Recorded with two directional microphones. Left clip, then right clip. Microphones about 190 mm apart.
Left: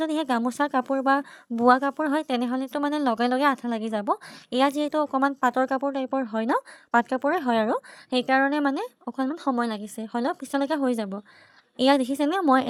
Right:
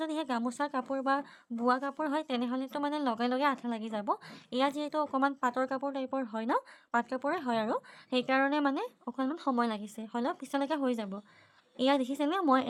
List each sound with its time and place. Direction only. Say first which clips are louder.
0.0 s a woman's voice: left 8 dB; 35° left (ahead or behind)